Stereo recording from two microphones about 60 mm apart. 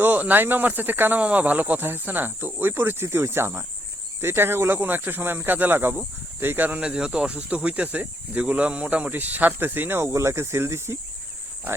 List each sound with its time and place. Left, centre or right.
0.0 s speech: right
6.7 s speech: centre; by 10.9 s right